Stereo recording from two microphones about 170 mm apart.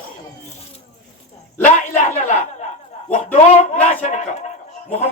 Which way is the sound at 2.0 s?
45° left (ahead or behind).